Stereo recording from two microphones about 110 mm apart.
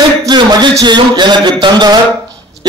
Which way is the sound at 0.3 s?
40° right (ahead or behind).